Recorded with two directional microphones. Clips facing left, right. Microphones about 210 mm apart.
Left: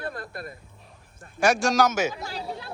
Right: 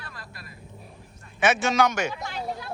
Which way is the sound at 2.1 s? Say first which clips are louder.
Right 1 dB; 35° left (ahead or behind).